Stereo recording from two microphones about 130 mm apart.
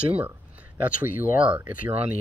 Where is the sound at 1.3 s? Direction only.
10° right (ahead or behind).